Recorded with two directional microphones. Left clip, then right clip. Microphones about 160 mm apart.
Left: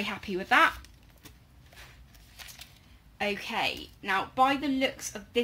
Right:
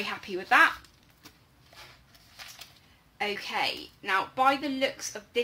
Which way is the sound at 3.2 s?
45° left (ahead or behind).